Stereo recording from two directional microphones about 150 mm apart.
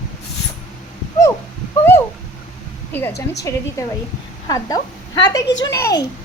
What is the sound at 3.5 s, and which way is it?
Speech, 20° left (ahead or behind).